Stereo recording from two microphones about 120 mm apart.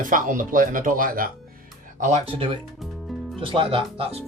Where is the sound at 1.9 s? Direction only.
90° right.